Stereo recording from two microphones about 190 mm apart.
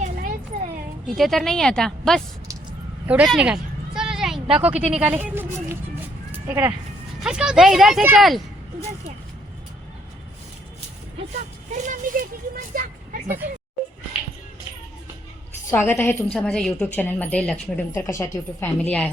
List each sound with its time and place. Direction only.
0.0 s a sound: 45° right (ahead or behind)
1.0 s a woman's voice: centre (ahead or behind)
11.3 s speech: 40° right (ahead or behind)
12.7 s a sound: 55° right (ahead or behind)
13.2 s speech: 10° right (ahead or behind)
15.7 s a woman's voice: 10° left (ahead or behind)